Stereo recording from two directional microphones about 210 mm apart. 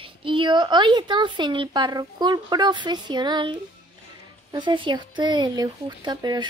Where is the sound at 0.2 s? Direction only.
25° right (ahead or behind).